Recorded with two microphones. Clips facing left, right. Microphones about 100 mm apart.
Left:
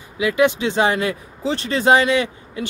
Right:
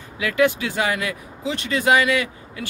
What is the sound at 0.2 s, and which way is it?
Speech, 20° left (ahead or behind).